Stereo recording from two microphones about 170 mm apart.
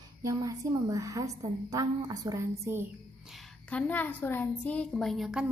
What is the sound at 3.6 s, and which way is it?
A woman's voice, 10° left (ahead or behind).